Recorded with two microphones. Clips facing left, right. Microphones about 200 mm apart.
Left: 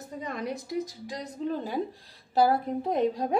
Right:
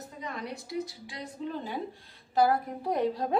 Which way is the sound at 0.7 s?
40° left (ahead or behind).